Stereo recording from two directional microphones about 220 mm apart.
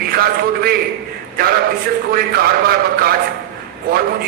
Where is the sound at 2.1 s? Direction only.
45° right (ahead or behind).